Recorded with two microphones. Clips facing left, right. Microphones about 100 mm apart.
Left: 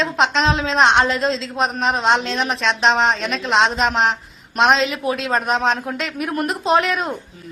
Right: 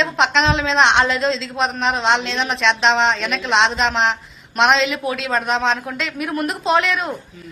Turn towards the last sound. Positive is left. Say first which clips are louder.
# left 1 dB
turn(degrees=35)  # may be behind; listen again after turning